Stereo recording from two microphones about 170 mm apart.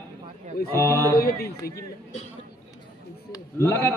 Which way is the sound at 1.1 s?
60° left (ahead or behind).